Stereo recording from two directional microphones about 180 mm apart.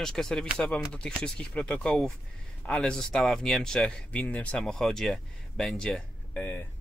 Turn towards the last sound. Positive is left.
turn(degrees=10)  # may be behind; listen again after turning